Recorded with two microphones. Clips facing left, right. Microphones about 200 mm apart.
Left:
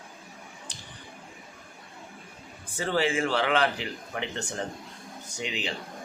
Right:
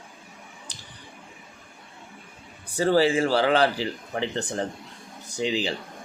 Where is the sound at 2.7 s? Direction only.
35° right (ahead or behind).